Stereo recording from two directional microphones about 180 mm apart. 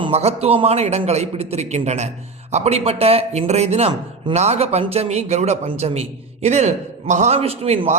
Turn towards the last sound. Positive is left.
turn(degrees=-35)  # may be behind; listen again after turning